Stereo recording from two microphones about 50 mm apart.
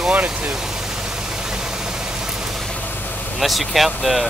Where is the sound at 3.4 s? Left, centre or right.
Centre.